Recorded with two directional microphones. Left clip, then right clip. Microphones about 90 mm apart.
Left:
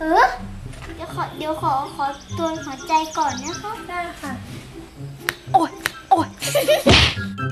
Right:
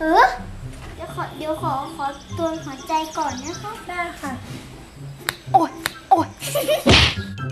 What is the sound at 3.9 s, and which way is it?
Speech, 20° right (ahead or behind).